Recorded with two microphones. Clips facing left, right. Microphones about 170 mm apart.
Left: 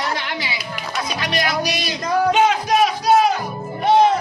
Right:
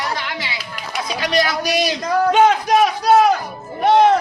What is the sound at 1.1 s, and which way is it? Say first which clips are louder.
Speech: right 4 dB; 35° right (ahead or behind).